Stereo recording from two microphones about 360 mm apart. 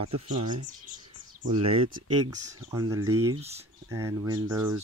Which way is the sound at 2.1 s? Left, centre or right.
Centre.